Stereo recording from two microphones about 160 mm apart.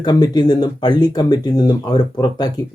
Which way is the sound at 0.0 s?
25° left (ahead or behind).